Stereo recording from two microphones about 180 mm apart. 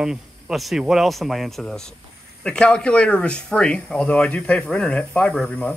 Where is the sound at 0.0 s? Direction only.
Centre (ahead or behind).